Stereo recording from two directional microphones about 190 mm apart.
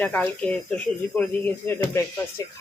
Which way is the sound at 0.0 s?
5° left (ahead or behind).